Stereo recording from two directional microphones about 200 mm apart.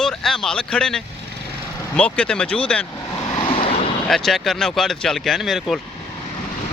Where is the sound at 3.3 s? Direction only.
30° left (ahead or behind).